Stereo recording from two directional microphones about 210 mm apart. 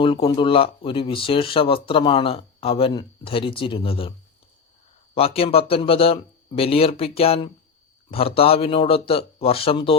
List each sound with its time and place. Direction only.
0.0 s speech: 25° left (ahead or behind)
5.1 s speech: 25° left (ahead or behind)